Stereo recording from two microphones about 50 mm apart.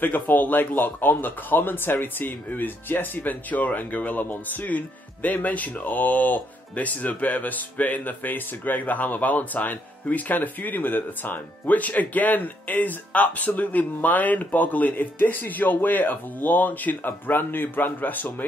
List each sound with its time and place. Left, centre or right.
0.0 s speech: left